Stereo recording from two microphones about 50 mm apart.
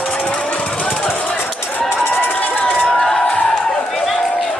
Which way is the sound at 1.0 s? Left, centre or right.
Left.